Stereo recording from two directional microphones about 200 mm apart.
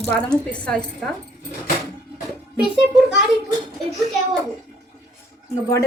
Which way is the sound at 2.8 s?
Centre (ahead or behind).